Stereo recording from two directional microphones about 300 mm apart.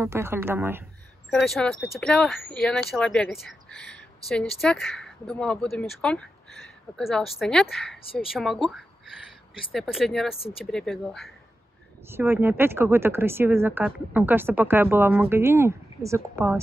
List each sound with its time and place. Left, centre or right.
0.0 s speech: centre
8.0 s speech: centre
8.3 s speech: centre
10.3 s speech: centre
10.6 s speech: centre